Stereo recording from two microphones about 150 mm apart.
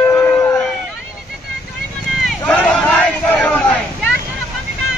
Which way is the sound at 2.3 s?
10° left (ahead or behind).